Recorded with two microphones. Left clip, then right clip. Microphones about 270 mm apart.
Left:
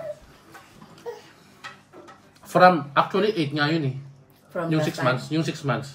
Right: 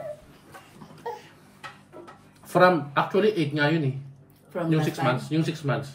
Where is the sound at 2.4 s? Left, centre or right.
Centre.